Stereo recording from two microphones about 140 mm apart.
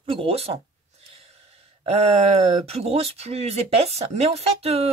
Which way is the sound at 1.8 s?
50° right (ahead or behind).